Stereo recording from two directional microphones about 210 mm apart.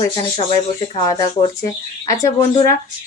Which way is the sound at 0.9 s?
20° left (ahead or behind).